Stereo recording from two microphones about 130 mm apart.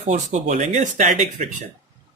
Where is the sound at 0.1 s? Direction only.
60° right (ahead or behind).